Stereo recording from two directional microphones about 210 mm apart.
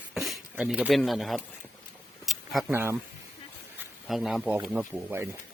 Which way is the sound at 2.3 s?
Centre (ahead or behind).